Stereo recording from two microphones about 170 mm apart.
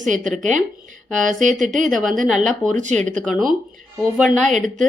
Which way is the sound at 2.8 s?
45° right (ahead or behind).